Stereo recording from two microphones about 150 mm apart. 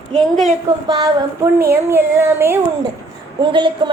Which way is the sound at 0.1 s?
5° left (ahead or behind).